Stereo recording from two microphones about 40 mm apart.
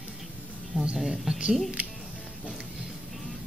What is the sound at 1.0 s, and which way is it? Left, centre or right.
Speech, centre.